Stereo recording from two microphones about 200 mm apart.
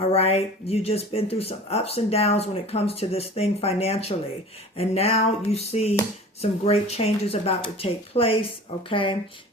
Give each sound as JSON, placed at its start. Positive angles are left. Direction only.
{"t": 0.1, "sound": "speech", "side_deg": 30}